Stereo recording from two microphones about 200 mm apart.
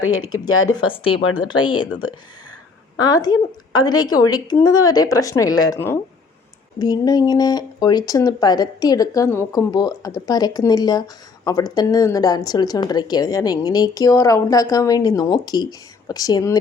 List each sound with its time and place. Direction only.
0.0 s speech: 90° left
0.9 s a woman's voice: 25° left (ahead or behind)
1.2 s speech: 90° left
1.5 s a woman's voice: 25° left (ahead or behind)
3.0 s a woman's voice: 20° left (ahead or behind)